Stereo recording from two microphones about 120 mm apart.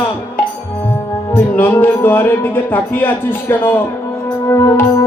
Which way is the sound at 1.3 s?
20° left (ahead or behind).